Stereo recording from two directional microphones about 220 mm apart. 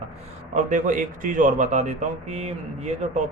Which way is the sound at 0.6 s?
35° right (ahead or behind).